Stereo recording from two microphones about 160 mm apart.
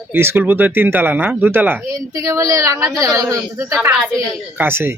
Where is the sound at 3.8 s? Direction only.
Centre (ahead or behind).